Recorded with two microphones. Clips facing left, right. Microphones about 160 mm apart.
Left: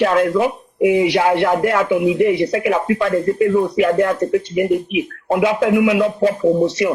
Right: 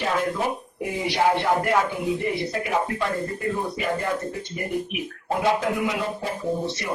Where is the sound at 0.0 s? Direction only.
90° left.